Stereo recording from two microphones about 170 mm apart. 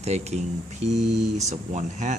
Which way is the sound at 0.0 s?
40° right (ahead or behind).